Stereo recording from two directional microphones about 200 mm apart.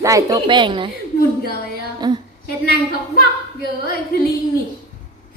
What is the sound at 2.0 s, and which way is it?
Speech, 20° right (ahead or behind).